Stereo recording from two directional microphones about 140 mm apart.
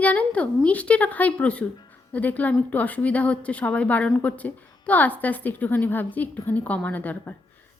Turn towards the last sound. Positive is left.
turn(degrees=10)  # may be behind; listen again after turning